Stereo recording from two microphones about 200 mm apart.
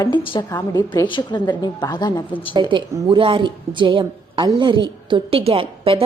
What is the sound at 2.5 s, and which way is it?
A woman's voice, 25° right (ahead or behind).